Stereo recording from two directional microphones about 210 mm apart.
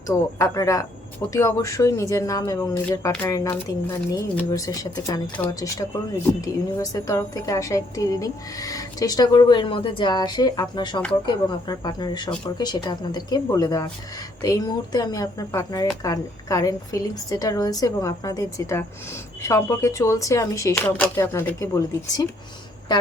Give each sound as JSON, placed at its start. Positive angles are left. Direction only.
{"t": 0.1, "sound": "a woman's voice", "side_deg": 15}